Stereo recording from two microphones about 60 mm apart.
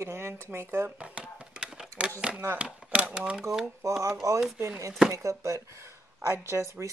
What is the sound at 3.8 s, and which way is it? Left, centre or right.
Speech, right.